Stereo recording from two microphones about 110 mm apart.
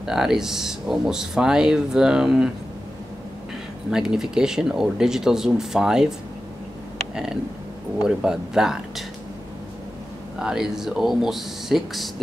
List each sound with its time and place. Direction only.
0.0 s speech: 5° right (ahead or behind)
3.9 s speech: 5° right (ahead or behind)
8.0 s speech: 5° right (ahead or behind)
10.4 s speech: 5° right (ahead or behind)